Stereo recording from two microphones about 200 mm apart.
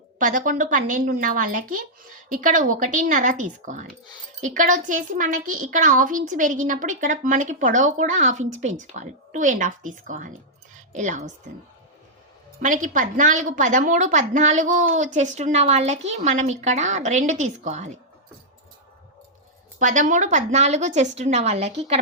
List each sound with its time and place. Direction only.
0.2 s a woman's voice: 40° right (ahead or behind)
12.6 s a woman's voice: 40° right (ahead or behind)
19.8 s a woman's voice: 40° right (ahead or behind)